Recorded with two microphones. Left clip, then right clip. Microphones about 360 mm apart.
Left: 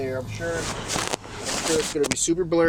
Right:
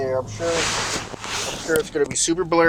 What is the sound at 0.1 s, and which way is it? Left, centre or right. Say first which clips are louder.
Speech: right 6 dB; right.